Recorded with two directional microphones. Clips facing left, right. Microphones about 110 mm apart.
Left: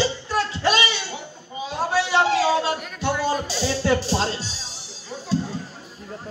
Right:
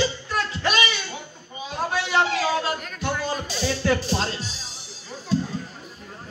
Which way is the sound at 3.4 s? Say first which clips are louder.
Left 1 dB; 35° left (ahead or behind).